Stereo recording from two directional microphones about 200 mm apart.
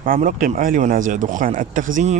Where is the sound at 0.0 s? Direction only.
45° right (ahead or behind).